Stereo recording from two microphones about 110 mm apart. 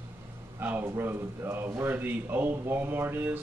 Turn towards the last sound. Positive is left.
turn(degrees=-20)  # may be behind; listen again after turning